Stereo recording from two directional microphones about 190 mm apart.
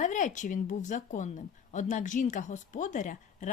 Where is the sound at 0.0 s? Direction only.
40° left (ahead or behind).